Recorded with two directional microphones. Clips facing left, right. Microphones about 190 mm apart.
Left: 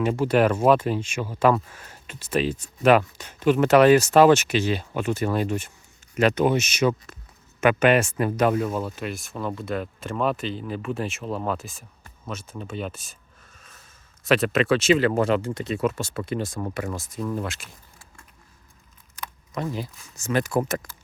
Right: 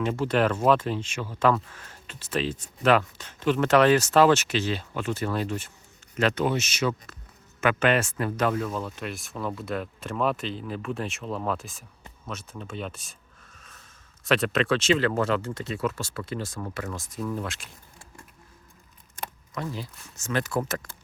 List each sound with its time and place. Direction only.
0.0 s speech: 10° left (ahead or behind)
12.3 s a sound: centre (ahead or behind)
14.3 s speech: 5° left (ahead or behind)
19.7 s speech: 10° left (ahead or behind)